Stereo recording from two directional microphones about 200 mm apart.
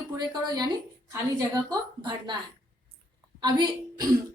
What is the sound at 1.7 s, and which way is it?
Speech, 20° right (ahead or behind).